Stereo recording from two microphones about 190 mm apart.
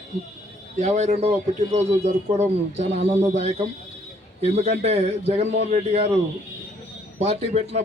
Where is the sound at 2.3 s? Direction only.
35° right (ahead or behind).